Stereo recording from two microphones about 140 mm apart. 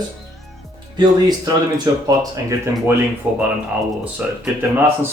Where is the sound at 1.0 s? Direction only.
30° right (ahead or behind).